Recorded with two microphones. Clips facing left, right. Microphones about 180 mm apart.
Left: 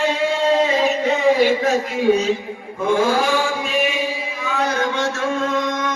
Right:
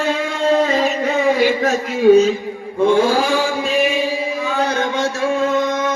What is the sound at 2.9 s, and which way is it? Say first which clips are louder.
Chant: right 2 dB; 30° right (ahead or behind).